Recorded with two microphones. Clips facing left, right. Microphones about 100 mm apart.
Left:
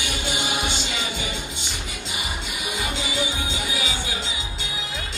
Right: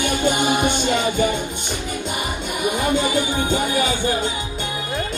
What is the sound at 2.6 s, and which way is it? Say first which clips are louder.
Speech: right 11 dB; 50° right (ahead or behind).